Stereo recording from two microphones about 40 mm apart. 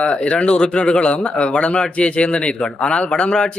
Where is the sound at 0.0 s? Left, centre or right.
Left.